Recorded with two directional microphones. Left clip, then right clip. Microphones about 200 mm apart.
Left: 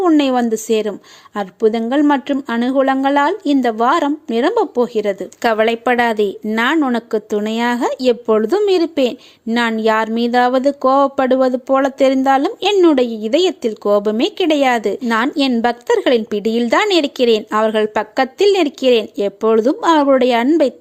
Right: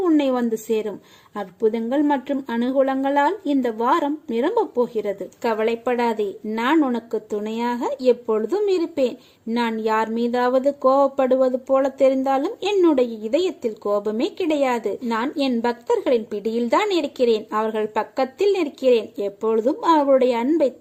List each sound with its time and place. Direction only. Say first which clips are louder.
0.0 s a woman's voice: left 6 dB; 10° left (ahead or behind)